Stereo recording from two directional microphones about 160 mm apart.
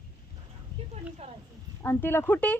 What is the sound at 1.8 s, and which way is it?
Speech, 15° left (ahead or behind).